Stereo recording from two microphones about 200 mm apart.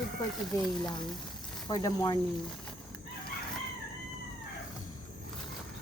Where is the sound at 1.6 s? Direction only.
20° left (ahead or behind).